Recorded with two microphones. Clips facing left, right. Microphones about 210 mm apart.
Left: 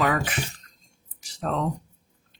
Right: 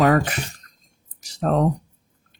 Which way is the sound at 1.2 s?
45° right (ahead or behind).